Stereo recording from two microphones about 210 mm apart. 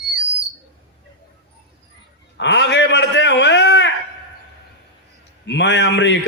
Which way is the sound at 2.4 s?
55° left (ahead or behind).